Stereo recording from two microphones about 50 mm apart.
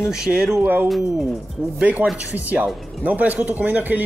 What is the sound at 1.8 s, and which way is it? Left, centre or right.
Speech, right.